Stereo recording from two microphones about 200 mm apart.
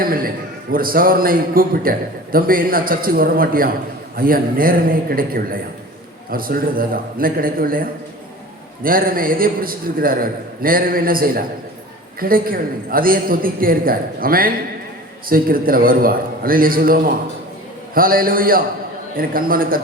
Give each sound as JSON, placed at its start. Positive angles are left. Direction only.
{"t": 0.0, "sound": "a man's voice", "side_deg": -45}